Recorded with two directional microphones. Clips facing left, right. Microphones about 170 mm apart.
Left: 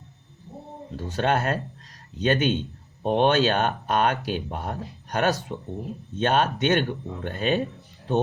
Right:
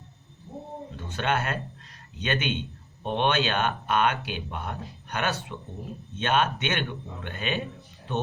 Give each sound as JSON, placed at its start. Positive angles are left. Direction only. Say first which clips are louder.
{"t": 0.9, "sound": "speech", "louder": "left 4 dB", "side_deg": 35}